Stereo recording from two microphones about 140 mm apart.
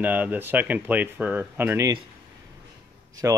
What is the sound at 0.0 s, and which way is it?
Speech, 10° right (ahead or behind).